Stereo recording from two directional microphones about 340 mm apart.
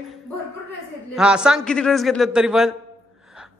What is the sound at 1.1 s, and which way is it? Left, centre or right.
A woman's voice, centre.